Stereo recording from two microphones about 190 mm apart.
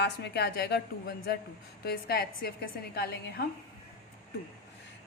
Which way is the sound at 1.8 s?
55° left (ahead or behind).